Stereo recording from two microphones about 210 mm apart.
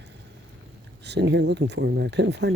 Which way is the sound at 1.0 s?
55° right (ahead or behind).